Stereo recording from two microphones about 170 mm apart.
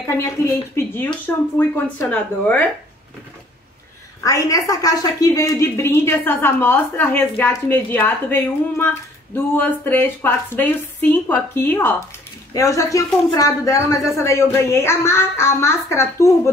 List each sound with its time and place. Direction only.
0.0 s a woman's voice: 15° left (ahead or behind)
4.2 s a woman's voice: 20° left (ahead or behind)